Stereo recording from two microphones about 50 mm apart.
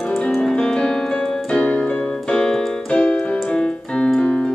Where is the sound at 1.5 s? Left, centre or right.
Left.